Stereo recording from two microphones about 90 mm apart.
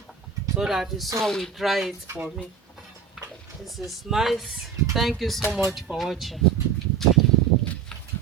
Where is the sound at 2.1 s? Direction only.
30° right (ahead or behind).